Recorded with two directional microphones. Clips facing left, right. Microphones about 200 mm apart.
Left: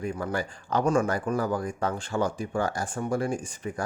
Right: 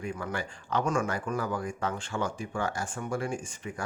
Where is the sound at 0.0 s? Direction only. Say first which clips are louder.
Left 4 dB; 40° left (ahead or behind).